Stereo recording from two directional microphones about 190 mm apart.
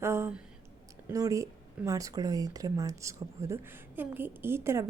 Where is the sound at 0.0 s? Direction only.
15° right (ahead or behind).